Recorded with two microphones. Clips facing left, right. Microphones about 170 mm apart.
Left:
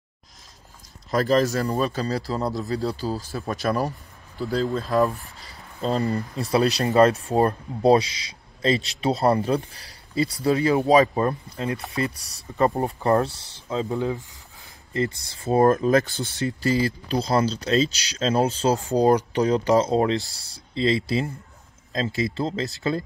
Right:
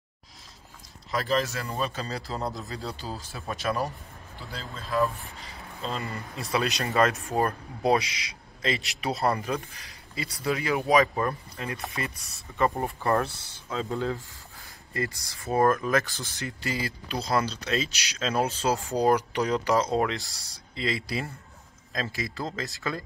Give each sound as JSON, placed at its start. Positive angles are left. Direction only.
{"t": 1.1, "sound": "speech", "side_deg": 40}
{"t": 13.2, "sound": "speech", "side_deg": 20}